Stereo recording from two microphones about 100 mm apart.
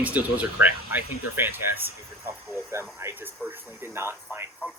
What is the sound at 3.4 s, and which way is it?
Radio, 20° right (ahead or behind).